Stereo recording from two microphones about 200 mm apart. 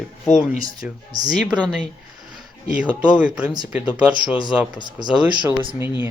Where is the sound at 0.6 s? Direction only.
20° right (ahead or behind).